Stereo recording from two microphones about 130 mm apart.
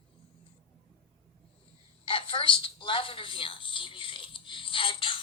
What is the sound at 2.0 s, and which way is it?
Telephone, 40° left (ahead or behind).